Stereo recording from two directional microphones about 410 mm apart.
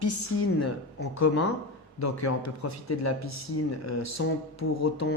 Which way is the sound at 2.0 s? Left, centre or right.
Left.